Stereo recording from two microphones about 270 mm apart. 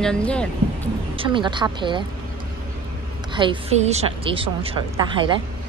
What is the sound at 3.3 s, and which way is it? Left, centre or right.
A woman's voice, centre.